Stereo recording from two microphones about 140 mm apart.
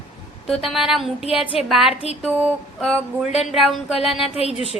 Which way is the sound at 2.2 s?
10° right (ahead or behind).